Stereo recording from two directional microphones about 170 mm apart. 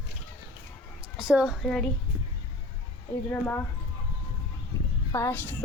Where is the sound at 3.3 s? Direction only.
10° left (ahead or behind).